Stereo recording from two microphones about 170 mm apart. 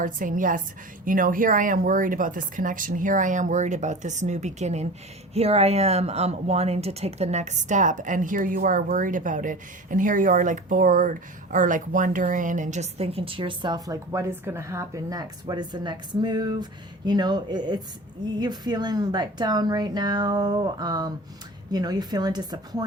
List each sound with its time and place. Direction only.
0.0 s speech: 50° right (ahead or behind); by 22.8 s 25° right (ahead or behind)